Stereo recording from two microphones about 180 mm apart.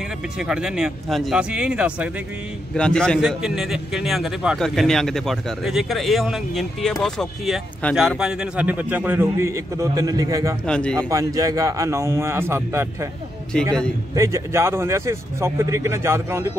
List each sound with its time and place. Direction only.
0.4 s a man's voice: 5° right (ahead or behind)
2.7 s a man's voice: 5° left (ahead or behind); by 10.5 s 20° right (ahead or behind)
10.7 s a man's voice: 5° left (ahead or behind)
11.0 s a man's voice: 20° right (ahead or behind)
14.1 s a man's voice: 15° right (ahead or behind)